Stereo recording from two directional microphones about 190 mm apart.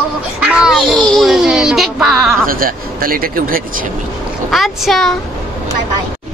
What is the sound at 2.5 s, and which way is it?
Speech, 50° right (ahead or behind).